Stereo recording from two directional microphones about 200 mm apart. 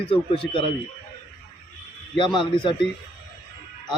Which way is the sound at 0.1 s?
25° left (ahead or behind).